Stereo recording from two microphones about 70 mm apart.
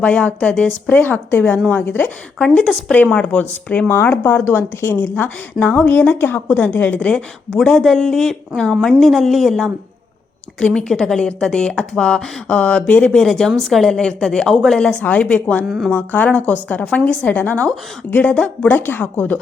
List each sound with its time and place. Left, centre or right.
0.0 s a woman's voice: centre
2.4 s speech: centre
3.8 s a woman's voice: left
7.1 s speech: centre
13.1 s a woman's voice: centre
15.6 s speech: centre
15.9 s a woman's voice: left
18.9 s a woman's voice: left